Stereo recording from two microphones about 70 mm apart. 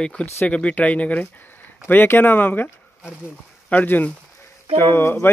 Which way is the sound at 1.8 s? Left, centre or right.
Left.